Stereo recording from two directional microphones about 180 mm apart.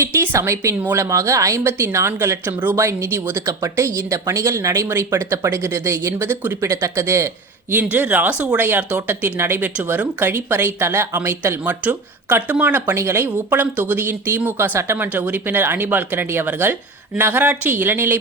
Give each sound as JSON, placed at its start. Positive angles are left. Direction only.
{"t": 0.0, "sound": "speech", "side_deg": -15}